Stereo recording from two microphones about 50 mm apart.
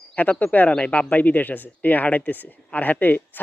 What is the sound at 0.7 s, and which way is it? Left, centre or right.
Speech, left.